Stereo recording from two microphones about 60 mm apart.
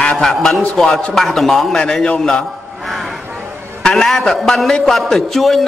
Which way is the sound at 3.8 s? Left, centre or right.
Centre.